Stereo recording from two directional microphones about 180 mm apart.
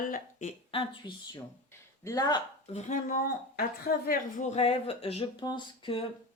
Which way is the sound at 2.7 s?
40° left (ahead or behind).